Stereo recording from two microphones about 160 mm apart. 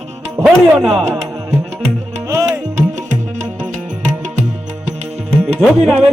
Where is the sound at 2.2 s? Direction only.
20° right (ahead or behind).